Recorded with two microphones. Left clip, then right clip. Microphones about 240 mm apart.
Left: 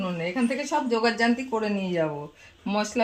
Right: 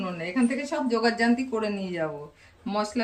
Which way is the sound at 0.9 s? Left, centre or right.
Left.